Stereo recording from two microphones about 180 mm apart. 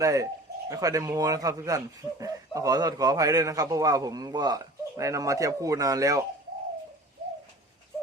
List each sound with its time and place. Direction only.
0.0 s speech: 15° right (ahead or behind)